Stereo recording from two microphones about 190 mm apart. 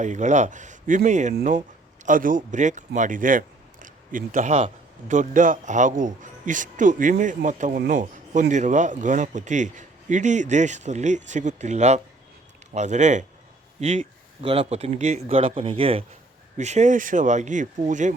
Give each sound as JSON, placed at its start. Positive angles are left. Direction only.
{"t": 0.0, "sound": "speech", "side_deg": -40}